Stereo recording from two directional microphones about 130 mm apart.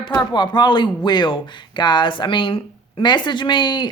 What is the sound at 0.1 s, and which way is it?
Speech, 35° left (ahead or behind).